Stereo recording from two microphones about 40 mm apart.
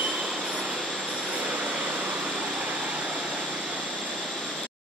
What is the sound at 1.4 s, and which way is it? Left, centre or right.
Vehicle, right.